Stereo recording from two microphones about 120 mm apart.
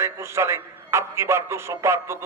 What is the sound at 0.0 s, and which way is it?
A man's voice, 20° right (ahead or behind).